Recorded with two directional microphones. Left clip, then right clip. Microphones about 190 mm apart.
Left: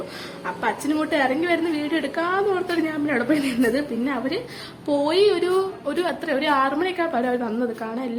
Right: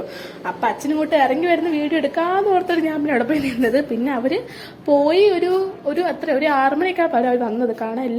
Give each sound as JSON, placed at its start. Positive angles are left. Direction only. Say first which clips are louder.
{"t": 0.4, "sound": "a woman's voice", "louder": "right 4 dB", "side_deg": -15}